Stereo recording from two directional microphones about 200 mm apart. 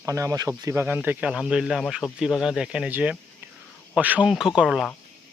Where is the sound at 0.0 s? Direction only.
15° right (ahead or behind).